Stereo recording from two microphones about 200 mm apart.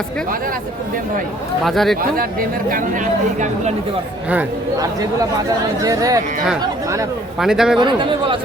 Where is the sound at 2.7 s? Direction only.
40° right (ahead or behind).